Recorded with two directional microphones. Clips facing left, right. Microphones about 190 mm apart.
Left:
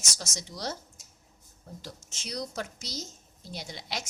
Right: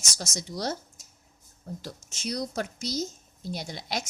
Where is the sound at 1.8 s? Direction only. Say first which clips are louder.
Right 6 dB; 50° right (ahead or behind).